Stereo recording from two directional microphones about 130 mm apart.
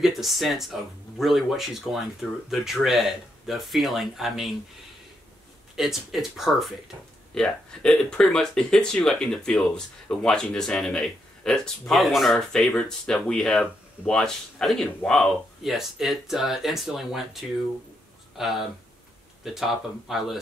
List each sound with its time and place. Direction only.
0.0 s speech: centre (ahead or behind)
5.8 s speech: centre (ahead or behind)